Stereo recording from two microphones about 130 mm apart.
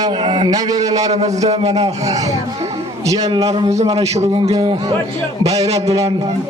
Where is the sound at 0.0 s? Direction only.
35° right (ahead or behind).